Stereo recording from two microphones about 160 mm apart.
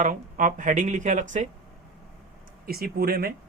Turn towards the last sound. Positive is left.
turn(degrees=-70)  # may be behind; listen again after turning